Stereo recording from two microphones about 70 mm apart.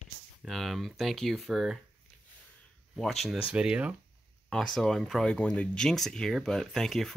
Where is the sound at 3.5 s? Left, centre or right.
Centre.